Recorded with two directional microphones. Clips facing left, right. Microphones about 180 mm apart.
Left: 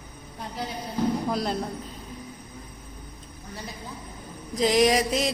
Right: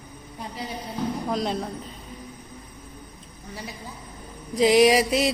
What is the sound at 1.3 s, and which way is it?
Speech, 5° left (ahead or behind).